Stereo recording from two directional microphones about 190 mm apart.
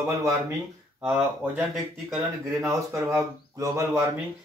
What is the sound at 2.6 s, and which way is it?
A man's voice, 15° right (ahead or behind).